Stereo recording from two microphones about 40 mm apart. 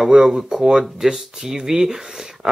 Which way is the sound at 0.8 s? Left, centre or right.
Centre.